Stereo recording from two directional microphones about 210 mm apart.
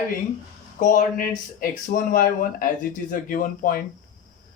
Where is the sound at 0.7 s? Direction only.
40° left (ahead or behind).